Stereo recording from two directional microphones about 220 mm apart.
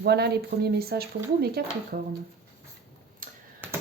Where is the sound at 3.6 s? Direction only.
10° right (ahead or behind).